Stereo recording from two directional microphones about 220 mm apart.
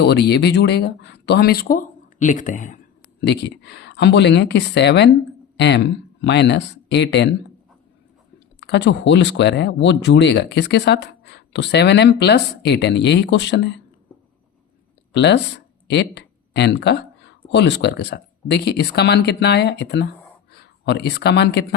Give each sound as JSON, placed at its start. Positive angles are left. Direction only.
{"t": 0.0, "sound": "speech", "side_deg": 50}
{"t": 3.2, "sound": "speech", "side_deg": 50}
{"t": 8.6, "sound": "speech", "side_deg": 50}
{"t": 15.1, "sound": "speech", "side_deg": 50}